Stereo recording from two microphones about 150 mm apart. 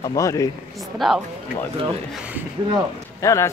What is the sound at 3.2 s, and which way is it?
Speech, 20° left (ahead or behind).